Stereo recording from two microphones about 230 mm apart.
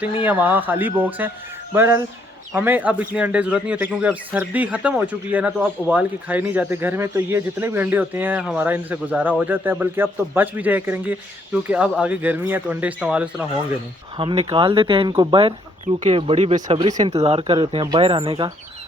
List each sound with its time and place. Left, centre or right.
0.0 s a man's voice: centre
14.2 s speech: right